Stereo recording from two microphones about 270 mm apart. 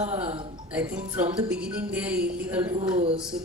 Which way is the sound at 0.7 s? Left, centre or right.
Centre.